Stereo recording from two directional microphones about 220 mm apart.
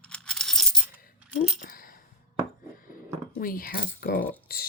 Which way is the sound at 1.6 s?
40° left (ahead or behind).